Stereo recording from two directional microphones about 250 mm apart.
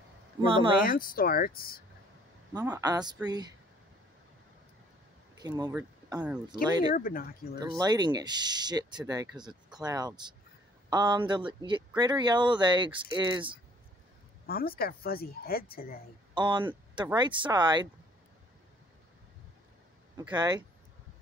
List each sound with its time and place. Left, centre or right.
0.4 s speech: centre
0.8 s speech: left
2.5 s speech: centre
5.4 s speech: centre
7.0 s speech: left
7.6 s speech: centre
14.4 s a sound: left
14.8 s speech: left
16.3 s speech: centre
20.2 s speech: centre